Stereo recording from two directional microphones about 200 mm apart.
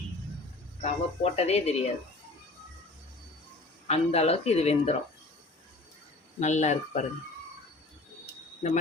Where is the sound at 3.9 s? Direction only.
30° left (ahead or behind).